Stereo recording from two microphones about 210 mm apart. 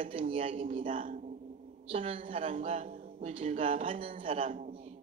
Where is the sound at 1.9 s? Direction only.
25° right (ahead or behind).